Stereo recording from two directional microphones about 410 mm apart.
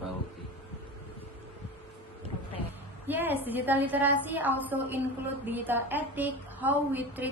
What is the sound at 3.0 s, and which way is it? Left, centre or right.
A woman's voice, centre.